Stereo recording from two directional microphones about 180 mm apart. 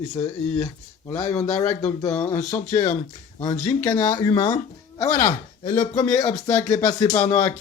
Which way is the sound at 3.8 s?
15° left (ahead or behind).